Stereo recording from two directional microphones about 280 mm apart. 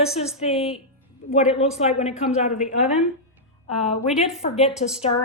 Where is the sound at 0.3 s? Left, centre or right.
Left.